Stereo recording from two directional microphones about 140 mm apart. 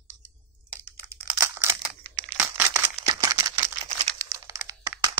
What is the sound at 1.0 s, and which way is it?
Crumpling, 15° right (ahead or behind).